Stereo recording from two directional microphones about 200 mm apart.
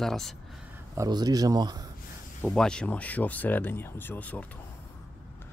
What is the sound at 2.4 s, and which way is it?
Speech, 5° left (ahead or behind).